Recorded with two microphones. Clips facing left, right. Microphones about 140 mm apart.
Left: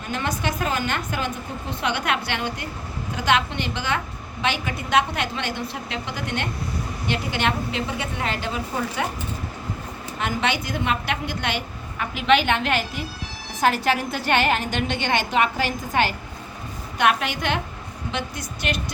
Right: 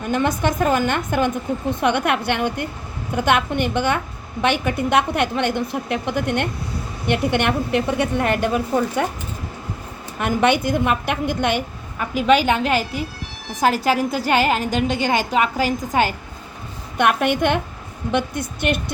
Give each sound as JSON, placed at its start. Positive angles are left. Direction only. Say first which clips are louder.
{"t": 0.1, "sound": "a woman's voice", "louder": "right 6 dB", "side_deg": -55}
{"t": 10.2, "sound": "a woman's voice", "louder": "right 7 dB", "side_deg": -55}
{"t": 12.1, "sound": "a woman's voice", "louder": "right 3 dB", "side_deg": -40}
{"t": 17.0, "sound": "a woman's voice", "louder": "right 4 dB", "side_deg": -55}